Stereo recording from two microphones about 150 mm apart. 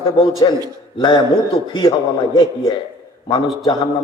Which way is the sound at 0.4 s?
30° left (ahead or behind).